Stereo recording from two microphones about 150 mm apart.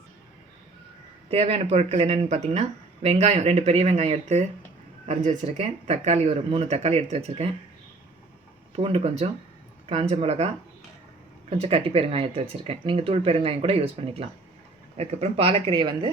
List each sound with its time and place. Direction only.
1.3 s speech: 40° right (ahead or behind)
8.7 s speech: 40° right (ahead or behind)